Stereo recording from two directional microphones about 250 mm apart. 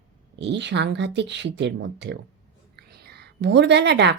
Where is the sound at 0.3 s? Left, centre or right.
Right.